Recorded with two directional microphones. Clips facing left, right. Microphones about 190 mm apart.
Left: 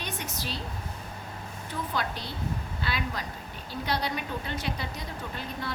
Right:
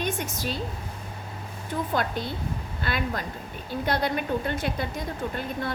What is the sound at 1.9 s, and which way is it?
A woman's voice, 50° right (ahead or behind).